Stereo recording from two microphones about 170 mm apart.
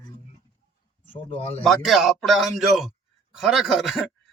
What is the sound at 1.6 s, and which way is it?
Speech, centre (ahead or behind).